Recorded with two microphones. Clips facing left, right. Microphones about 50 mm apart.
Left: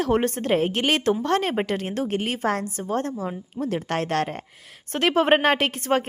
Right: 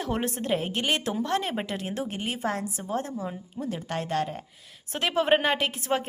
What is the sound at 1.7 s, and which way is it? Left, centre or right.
A woman's voice, left.